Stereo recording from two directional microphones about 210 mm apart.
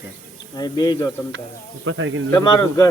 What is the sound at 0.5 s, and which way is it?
Speech, 20° left (ahead or behind).